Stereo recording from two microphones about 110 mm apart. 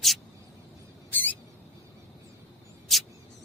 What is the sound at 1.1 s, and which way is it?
Mouse, 15° left (ahead or behind).